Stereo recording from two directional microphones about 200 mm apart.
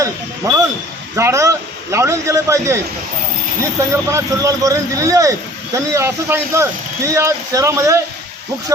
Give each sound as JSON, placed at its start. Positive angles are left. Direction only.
{"t": 1.1, "sound": "speech", "side_deg": -15}
{"t": 3.8, "sound": "speech", "side_deg": -15}